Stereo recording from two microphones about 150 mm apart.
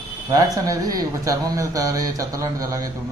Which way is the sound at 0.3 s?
25° right (ahead or behind).